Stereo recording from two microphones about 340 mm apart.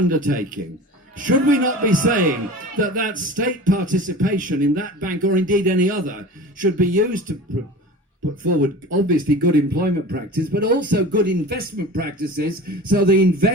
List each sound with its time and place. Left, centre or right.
0.1 s speech: right
8.4 s speech: right